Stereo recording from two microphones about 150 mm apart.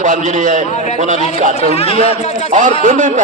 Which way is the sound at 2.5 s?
55° right (ahead or behind).